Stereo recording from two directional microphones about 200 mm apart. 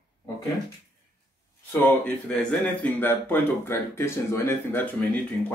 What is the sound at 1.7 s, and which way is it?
Speech, 5° left (ahead or behind).